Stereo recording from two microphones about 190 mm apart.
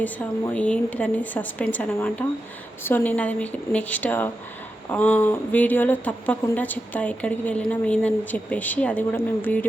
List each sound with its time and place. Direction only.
0.0 s a woman's voice: 10° left (ahead or behind)